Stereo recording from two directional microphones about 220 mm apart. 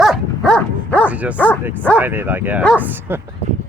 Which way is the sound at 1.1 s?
5° right (ahead or behind).